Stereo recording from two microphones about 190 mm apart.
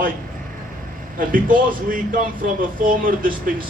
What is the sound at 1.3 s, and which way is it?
Speech, 45° right (ahead or behind).